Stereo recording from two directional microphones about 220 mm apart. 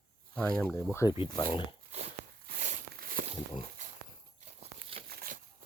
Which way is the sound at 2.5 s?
35° right (ahead or behind).